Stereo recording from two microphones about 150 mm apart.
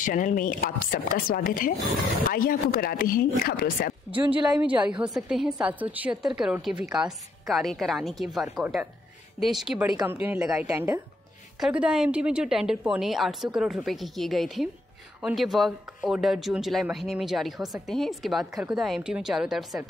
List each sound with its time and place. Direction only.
0.0 s speech: 60° left (ahead or behind); by 3.9 s 80° left
4.3 s a woman's voice: 10° right (ahead or behind)
10.7 s a woman's voice: 15° right (ahead or behind)
11.6 s a woman's voice: 5° right (ahead or behind)